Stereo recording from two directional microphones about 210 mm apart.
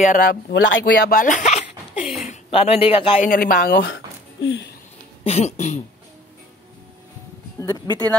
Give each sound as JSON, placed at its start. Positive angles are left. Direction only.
{"t": 0.0, "sound": "speech", "side_deg": 40}
{"t": 3.3, "sound": "speech", "side_deg": 40}
{"t": 3.8, "sound": "a sound", "side_deg": 60}
{"t": 5.2, "sound": "speech", "side_deg": 30}
{"t": 7.5, "sound": "speech", "side_deg": 15}